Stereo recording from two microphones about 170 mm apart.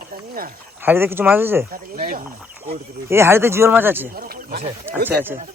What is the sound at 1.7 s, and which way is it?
Speech, 55° right (ahead or behind).